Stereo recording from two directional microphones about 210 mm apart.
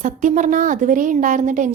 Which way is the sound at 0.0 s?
35° right (ahead or behind).